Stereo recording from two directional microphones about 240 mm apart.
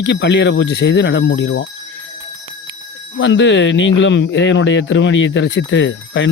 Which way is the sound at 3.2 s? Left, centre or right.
Left.